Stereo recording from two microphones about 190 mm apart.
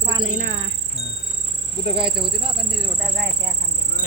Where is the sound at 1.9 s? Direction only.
25° right (ahead or behind).